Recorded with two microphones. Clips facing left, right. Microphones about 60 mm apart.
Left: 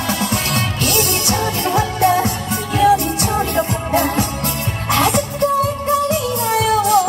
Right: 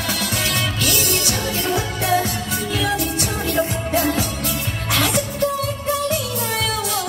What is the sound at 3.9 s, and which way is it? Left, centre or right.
Music, left.